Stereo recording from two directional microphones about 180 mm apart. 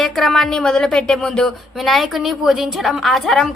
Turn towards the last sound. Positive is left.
turn(degrees=0)  # may be behind; listen again after turning